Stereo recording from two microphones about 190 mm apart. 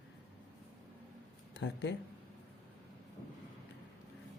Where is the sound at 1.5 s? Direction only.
70° left (ahead or behind).